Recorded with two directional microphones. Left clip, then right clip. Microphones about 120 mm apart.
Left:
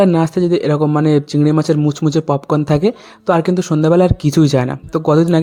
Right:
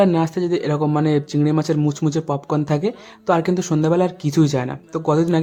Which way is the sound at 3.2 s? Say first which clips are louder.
Left 4 dB; 30° left (ahead or behind).